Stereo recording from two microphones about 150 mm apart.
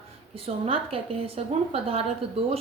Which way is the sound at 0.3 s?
40° right (ahead or behind).